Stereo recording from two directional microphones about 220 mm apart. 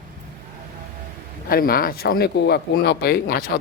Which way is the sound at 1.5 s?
40° left (ahead or behind).